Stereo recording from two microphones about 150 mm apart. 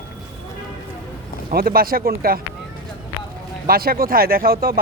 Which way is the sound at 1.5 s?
80° right.